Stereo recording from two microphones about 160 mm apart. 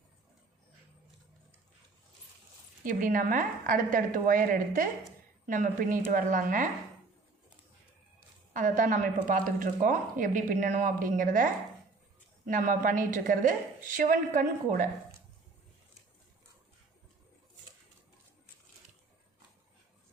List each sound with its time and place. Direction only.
2.8 s speech: 55° right (ahead or behind)
8.5 s speech: 55° right (ahead or behind)
12.5 s speech: 55° right (ahead or behind)